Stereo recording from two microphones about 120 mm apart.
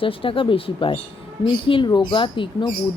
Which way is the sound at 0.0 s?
45° left (ahead or behind).